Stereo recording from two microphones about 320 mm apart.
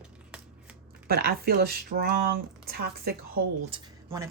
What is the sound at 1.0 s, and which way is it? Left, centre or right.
Speech, right.